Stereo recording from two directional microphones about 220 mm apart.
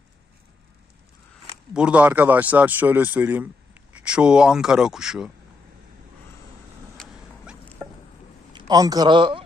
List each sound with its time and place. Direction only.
1.7 s speech: 5° right (ahead or behind)
6.9 s a sound: 5° left (ahead or behind)
8.5 s speech: 20° right (ahead or behind)